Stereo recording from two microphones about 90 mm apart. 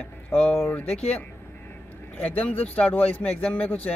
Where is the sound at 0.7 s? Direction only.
15° left (ahead or behind).